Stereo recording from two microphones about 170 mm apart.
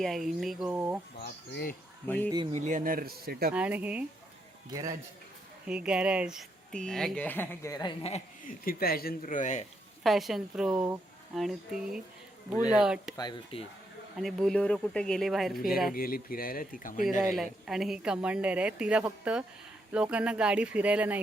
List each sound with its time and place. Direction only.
0.0 s speech: centre (ahead or behind)
0.7 s speech: 10° right (ahead or behind)
1.2 s speech: 75° left (ahead or behind)
2.0 s speech: 10° left (ahead or behind)
2.5 s speech: 45° right (ahead or behind); by 3.5 s 65° right (ahead or behind)
3.5 s speech: 10° right (ahead or behind)
5.6 s speech: 5° right (ahead or behind); by 7.9 s 20° left (ahead or behind)
8.0 s a man's voice: 40° left (ahead or behind)
8.6 s speech: 60° left (ahead or behind); by 9.6 s 45° left (ahead or behind)
10.0 s speech: centre (ahead or behind)
13.1 s speech: 25° left (ahead or behind)
14.2 s speech: centre (ahead or behind)
16.0 s speech: 60° left (ahead or behind)
17.3 s speech: centre (ahead or behind)